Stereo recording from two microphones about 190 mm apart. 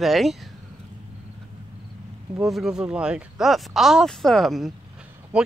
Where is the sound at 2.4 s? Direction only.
Centre (ahead or behind).